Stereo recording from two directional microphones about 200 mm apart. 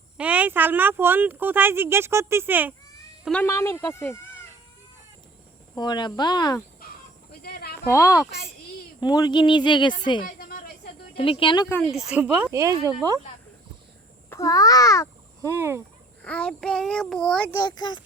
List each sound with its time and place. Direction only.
0.2 s speech: 5° right (ahead or behind)
3.4 s a child's voice: 15° left (ahead or behind)
5.7 s speech: 20° left (ahead or behind)
7.4 s a sound: 50° left (ahead or behind)
7.9 s a child's voice: 15° left (ahead or behind)
10.2 s a sound: 50° left (ahead or behind)
11.1 s speech: 25° left (ahead or behind)
11.7 s a child's voice: 5° left (ahead or behind); by 13.1 s 15° right (ahead or behind)
14.3 s a child's voice: 15° left (ahead or behind)
15.4 s speech: 15° right (ahead or behind)
16.2 s a child's voice: 5° left (ahead or behind)
17.6 s speech: 20° left (ahead or behind)